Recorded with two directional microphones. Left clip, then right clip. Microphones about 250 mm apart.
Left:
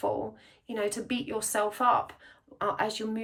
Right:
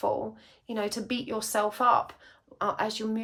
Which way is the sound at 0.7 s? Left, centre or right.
Centre.